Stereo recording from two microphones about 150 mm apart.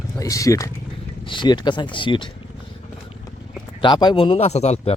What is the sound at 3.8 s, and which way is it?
Speech, 30° left (ahead or behind).